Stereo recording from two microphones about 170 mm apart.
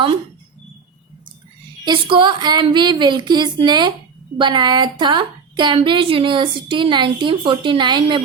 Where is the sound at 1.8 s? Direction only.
25° right (ahead or behind).